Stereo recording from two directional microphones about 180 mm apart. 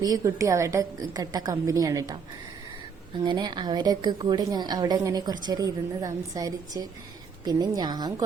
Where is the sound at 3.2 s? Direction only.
25° right (ahead or behind).